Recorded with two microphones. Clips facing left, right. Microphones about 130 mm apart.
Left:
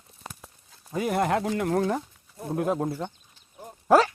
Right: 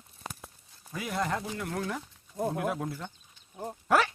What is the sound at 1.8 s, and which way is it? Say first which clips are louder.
Speech: left 8 dB; 40° left (ahead or behind).